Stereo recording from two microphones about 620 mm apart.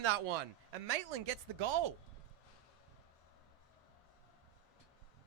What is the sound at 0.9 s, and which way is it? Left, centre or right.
Speech, right.